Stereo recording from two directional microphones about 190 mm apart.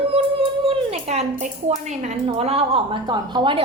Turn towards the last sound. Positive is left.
turn(degrees=-25)  # may be behind; listen again after turning